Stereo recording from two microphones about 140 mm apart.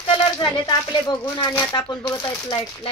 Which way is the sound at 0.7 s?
30° left (ahead or behind).